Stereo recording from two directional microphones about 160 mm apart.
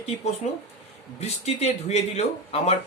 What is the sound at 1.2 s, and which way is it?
Speech, 40° left (ahead or behind).